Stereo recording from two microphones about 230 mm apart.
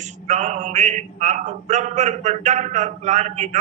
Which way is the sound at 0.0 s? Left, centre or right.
Right.